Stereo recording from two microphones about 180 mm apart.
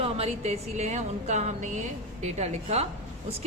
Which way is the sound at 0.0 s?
35° right (ahead or behind).